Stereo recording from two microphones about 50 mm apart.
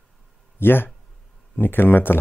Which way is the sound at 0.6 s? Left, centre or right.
Left.